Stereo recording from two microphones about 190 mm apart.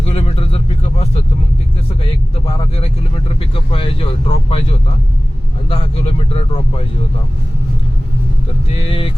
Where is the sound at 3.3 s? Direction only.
30° left (ahead or behind).